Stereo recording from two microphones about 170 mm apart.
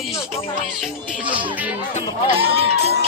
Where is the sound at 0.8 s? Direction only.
5° right (ahead or behind).